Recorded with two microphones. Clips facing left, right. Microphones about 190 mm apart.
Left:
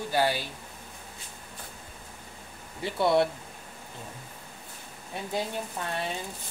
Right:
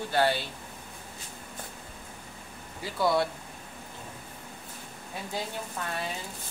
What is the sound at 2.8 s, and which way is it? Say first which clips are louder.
Speech: left 3 dB; 25° left (ahead or behind).